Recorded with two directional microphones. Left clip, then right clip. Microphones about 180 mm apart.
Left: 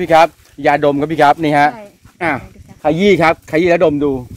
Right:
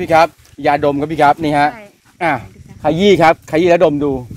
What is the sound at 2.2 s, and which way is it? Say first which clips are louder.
Speech: right 1 dB; 50° right (ahead or behind).